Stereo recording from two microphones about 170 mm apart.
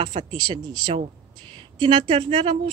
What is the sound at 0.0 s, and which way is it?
Speech, 35° right (ahead or behind).